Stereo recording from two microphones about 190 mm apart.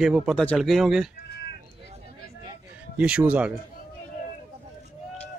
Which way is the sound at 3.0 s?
5° right (ahead or behind).